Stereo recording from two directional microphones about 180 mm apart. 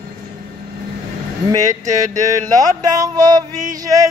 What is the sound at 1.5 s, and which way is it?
Speech, 20° right (ahead or behind).